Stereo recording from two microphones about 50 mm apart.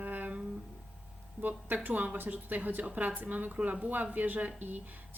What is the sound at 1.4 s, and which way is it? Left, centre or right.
Speech, right.